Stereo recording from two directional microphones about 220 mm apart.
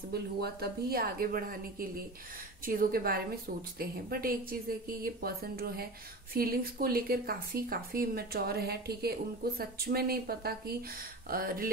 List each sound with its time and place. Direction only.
0.1 s speech: 45° right (ahead or behind)